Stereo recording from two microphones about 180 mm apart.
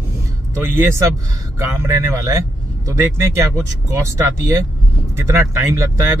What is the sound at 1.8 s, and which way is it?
Speech, 15° right (ahead or behind).